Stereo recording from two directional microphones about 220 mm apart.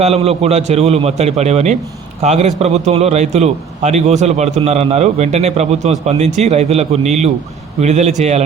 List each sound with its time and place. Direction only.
0.0 s a man's voice: 30° right (ahead or behind)